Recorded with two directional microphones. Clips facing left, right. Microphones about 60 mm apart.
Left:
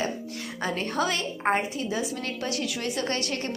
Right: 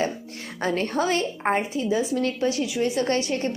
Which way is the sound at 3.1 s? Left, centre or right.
Centre.